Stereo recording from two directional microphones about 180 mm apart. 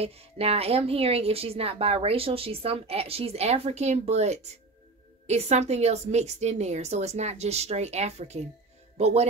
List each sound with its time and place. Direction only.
0.0 s a woman's voice: 35° right (ahead or behind)